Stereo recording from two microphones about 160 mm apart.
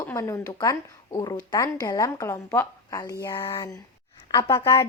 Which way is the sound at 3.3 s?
35° left (ahead or behind).